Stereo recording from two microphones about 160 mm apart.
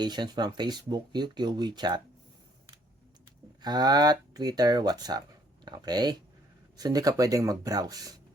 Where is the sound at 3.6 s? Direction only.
25° right (ahead or behind).